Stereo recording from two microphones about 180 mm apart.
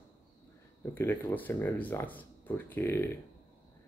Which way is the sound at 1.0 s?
10° left (ahead or behind).